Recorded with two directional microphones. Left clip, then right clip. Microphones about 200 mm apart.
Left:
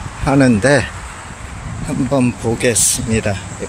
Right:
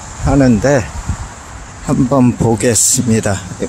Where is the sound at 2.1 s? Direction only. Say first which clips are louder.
Right 3 dB; 20° right (ahead or behind).